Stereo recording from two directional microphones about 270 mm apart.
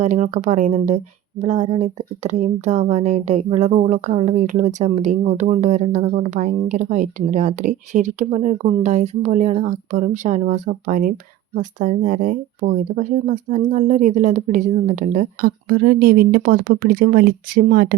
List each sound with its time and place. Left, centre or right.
0.0 s speech: right